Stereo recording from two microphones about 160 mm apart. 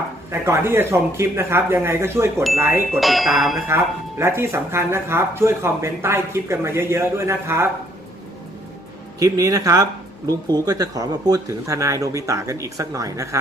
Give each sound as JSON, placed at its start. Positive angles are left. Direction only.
{"t": 0.3, "sound": "speech", "side_deg": -15}
{"t": 3.0, "sound": "speech", "side_deg": 0}
{"t": 4.2, "sound": "speech", "side_deg": -15}
{"t": 9.1, "sound": "speech", "side_deg": -20}